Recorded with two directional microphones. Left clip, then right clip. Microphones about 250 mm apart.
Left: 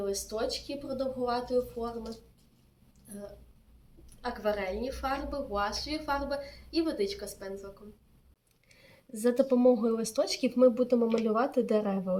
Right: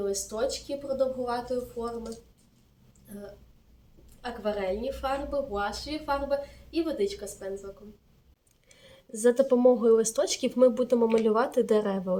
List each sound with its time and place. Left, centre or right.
0.0 s a woman's voice: centre
4.2 s a woman's voice: centre
8.7 s speech: centre